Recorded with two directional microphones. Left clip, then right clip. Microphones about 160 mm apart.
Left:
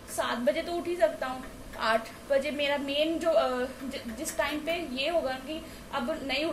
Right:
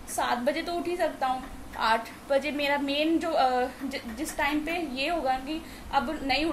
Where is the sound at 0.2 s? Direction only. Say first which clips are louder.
Right 1 dB; 15° right (ahead or behind).